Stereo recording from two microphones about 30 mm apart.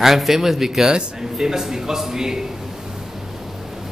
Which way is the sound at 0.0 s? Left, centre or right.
Centre.